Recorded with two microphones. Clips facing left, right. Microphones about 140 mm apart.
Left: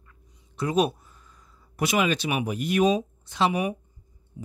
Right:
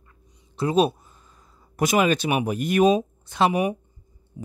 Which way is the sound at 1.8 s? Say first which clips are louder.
Right 4 dB; 45° right (ahead or behind).